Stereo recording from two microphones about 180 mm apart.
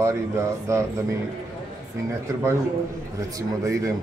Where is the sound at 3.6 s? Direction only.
20° right (ahead or behind).